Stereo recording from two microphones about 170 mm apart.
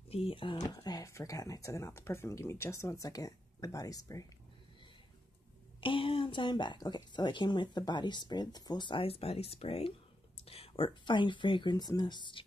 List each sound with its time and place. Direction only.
0.1 s speech: 30° left (ahead or behind)
5.8 s speech: 30° left (ahead or behind)